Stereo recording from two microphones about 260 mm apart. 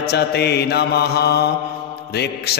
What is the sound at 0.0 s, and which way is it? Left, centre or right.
Music, left.